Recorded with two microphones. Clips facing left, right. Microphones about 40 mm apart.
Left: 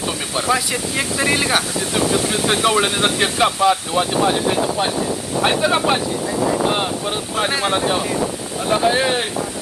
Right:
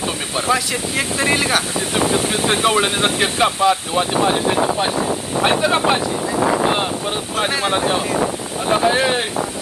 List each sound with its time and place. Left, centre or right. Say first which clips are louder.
0.5 s speech: right 1 dB; centre
2.0 s speech: even; right
2.7 s speech: even; right
3.4 s speech: even; centre
6.4 s speech: right 2 dB; right
7.3 s speech: even; centre